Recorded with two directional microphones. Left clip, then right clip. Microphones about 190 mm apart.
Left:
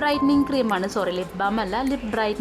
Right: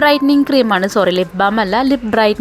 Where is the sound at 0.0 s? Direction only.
25° right (ahead or behind).